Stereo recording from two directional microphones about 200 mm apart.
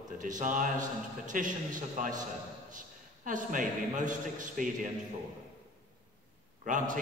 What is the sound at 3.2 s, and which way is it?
A man's voice, 40° right (ahead or behind).